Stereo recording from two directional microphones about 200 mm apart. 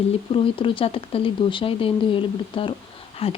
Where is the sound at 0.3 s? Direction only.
25° left (ahead or behind).